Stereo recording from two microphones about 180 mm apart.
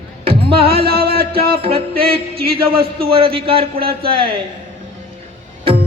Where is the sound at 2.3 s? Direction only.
55° right (ahead or behind).